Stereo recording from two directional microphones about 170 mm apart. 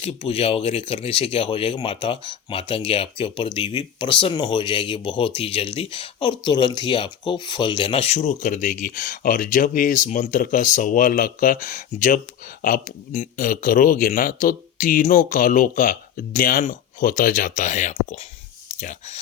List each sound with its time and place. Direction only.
0.0 s speech: 35° left (ahead or behind)